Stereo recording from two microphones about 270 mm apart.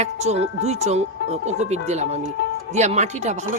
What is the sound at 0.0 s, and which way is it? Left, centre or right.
Speech, right.